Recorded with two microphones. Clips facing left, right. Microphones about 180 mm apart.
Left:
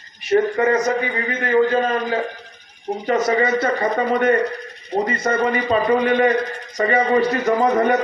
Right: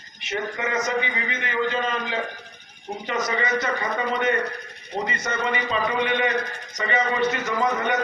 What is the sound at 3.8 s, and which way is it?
A man's voice, 45° left (ahead or behind).